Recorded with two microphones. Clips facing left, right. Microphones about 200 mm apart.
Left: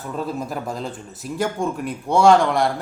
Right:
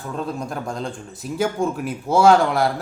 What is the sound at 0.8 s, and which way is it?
Speech, centre (ahead or behind).